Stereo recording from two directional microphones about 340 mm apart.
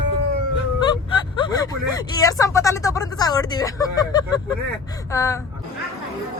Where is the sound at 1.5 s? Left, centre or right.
Centre.